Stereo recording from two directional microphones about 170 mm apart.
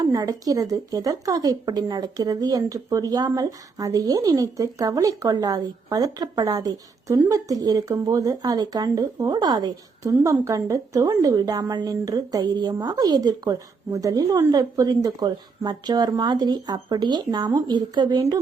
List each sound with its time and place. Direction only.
0.0 s a woman's voice: 20° right (ahead or behind)